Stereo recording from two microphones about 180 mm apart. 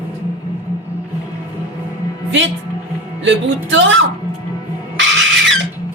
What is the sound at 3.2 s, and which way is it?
Music, 90° right.